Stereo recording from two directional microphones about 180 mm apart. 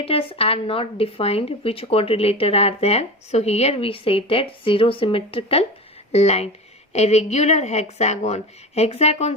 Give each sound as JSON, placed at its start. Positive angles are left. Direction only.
{"t": 0.0, "sound": "speech", "side_deg": 30}